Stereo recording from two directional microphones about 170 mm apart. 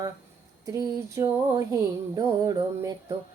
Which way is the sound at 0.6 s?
20° right (ahead or behind).